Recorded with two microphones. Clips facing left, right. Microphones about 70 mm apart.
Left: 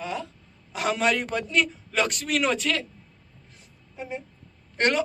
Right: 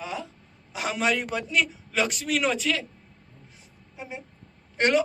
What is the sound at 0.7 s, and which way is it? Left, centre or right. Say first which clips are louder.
A man's voice: left 2 dB; centre.